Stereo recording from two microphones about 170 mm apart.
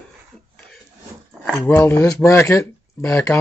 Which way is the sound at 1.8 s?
20° left (ahead or behind).